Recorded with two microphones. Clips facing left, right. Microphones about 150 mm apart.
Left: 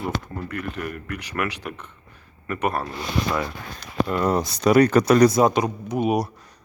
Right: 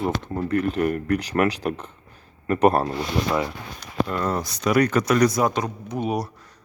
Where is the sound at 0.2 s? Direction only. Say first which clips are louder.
Right 8 dB; 30° right (ahead or behind).